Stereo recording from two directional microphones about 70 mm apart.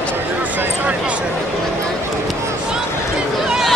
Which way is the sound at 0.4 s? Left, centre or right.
Right.